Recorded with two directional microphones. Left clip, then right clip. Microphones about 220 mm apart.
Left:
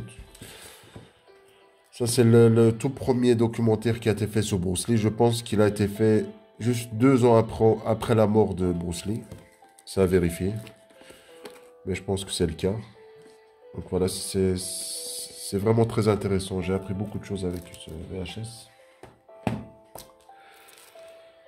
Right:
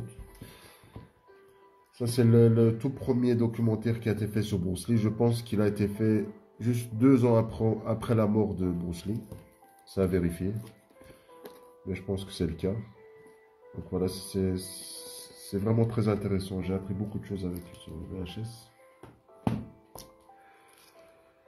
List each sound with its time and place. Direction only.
2.0 s speech: 45° left (ahead or behind)
11.9 s speech: 45° left (ahead or behind)
13.9 s speech: 45° left (ahead or behind)